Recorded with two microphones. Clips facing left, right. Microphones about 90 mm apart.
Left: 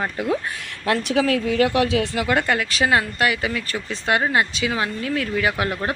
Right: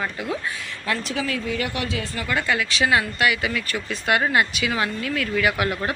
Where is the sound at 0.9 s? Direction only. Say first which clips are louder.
Left 7 dB; 75° left (ahead or behind).